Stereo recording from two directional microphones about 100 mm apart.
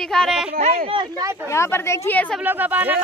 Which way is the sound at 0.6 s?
90° right.